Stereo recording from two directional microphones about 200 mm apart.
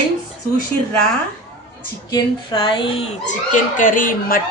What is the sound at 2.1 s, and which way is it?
Speech, 20° left (ahead or behind).